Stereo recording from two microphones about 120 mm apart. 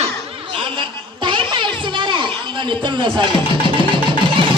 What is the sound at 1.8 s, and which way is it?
Music, 40° right (ahead or behind).